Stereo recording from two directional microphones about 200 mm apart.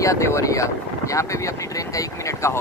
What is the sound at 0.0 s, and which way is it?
Speech, 15° left (ahead or behind).